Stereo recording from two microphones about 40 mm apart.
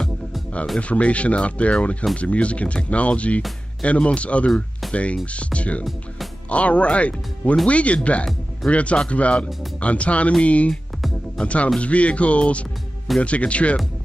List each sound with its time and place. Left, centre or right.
0.7 s speech: left